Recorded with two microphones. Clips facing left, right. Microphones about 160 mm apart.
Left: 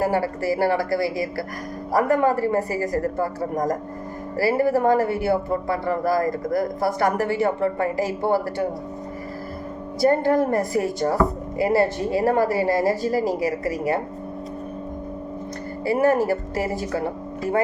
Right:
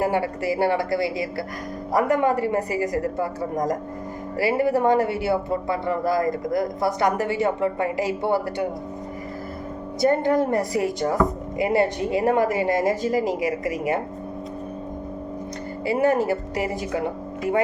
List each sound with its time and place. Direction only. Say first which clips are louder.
0.0 s speech: left 1 dB; 20° right (ahead or behind)
4.4 s speech: left 1 dB; 15° right (ahead or behind)
10.0 s speech: left 1 dB; 20° right (ahead or behind)
13.4 s a woman's voice: left 1 dB; 35° left (ahead or behind)
16.2 s a woman's voice: left 1 dB; 15° right (ahead or behind)